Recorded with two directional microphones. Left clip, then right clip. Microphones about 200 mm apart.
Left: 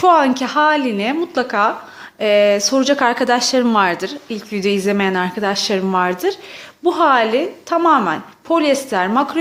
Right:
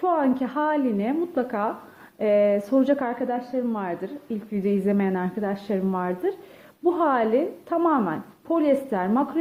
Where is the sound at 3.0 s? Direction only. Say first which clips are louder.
Left 12 dB; 30° left (ahead or behind).